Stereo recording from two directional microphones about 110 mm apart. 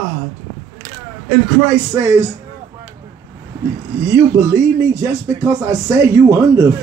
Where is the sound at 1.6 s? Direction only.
30° right (ahead or behind).